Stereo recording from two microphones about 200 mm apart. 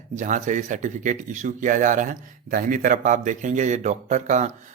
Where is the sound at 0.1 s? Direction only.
40° right (ahead or behind).